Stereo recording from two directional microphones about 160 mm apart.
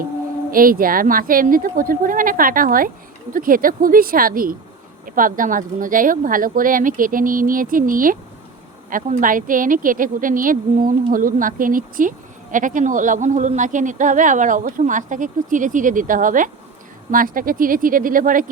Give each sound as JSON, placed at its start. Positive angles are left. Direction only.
{"t": 0.5, "sound": "speech", "side_deg": -60}